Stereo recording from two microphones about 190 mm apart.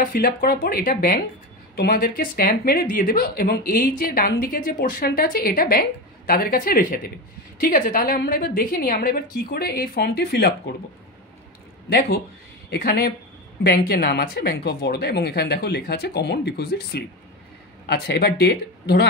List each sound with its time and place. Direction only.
0.0 s a woman's voice: 50° left (ahead or behind)
12.6 s speech: 55° left (ahead or behind)